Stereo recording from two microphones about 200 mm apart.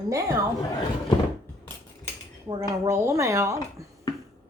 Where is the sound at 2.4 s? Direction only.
20° right (ahead or behind).